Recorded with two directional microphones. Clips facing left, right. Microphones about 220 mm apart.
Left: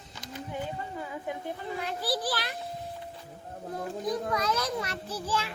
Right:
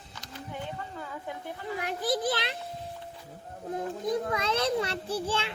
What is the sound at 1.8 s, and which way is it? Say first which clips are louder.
Children playing: right 3 dB; 20° right (ahead or behind).